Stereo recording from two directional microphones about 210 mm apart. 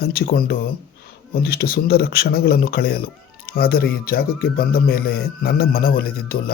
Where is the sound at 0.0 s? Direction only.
45° left (ahead or behind).